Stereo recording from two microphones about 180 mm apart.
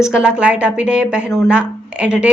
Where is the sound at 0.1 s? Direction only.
5° right (ahead or behind).